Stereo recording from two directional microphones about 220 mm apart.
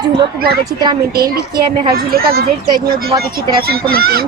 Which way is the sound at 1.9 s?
45° right (ahead or behind).